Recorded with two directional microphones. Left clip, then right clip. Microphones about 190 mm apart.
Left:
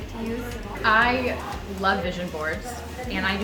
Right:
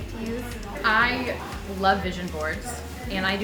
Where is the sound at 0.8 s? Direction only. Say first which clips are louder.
Left 2 dB; 15° right (ahead or behind).